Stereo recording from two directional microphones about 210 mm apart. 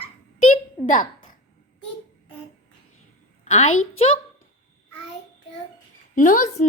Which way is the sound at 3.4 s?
30° left (ahead or behind).